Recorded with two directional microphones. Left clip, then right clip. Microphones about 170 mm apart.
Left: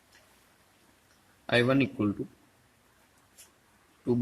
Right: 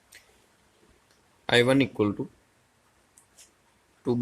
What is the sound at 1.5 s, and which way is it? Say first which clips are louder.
Speech: right 4 dB; 60° right (ahead or behind).